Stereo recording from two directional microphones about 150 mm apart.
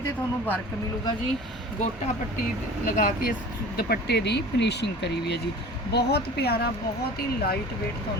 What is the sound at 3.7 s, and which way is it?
Speech, 90° left.